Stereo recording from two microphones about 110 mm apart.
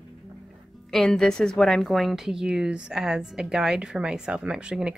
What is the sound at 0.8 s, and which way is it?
A woman's voice, 5° left (ahead or behind).